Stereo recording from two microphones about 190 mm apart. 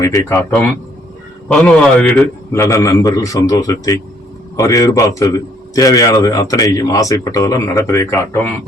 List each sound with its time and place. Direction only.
0.0 s a man's voice: 15° left (ahead or behind)
1.5 s a man's voice: 5° left (ahead or behind)